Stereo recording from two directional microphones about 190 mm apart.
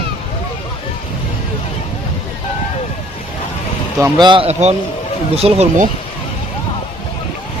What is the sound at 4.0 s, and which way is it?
Speech, 20° right (ahead or behind).